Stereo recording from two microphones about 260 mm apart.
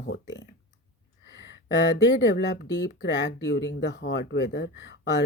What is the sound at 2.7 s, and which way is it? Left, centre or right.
Speech, left.